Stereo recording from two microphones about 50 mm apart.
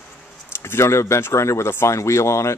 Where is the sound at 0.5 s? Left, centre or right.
Left.